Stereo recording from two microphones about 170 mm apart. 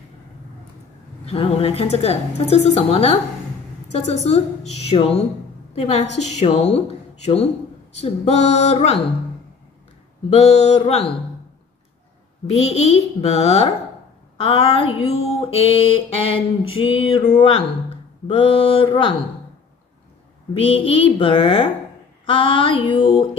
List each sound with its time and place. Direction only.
1.2 s mantra: 35° left (ahead or behind)
10.3 s mantra: 40° left (ahead or behind)
12.4 s mantra: 40° left (ahead or behind)
20.5 s mantra: 35° left (ahead or behind)